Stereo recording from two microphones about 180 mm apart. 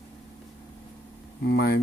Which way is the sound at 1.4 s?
65° left (ahead or behind).